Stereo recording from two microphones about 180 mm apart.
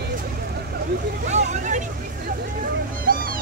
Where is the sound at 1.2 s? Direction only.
40° right (ahead or behind).